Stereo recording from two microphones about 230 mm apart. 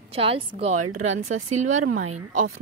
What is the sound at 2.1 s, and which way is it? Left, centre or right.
Speech, right.